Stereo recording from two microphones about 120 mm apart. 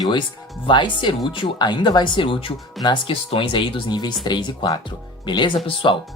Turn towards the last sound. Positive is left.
turn(degrees=45)  # may be behind; listen again after turning